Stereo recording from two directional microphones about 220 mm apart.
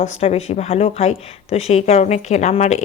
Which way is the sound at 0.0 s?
30° left (ahead or behind).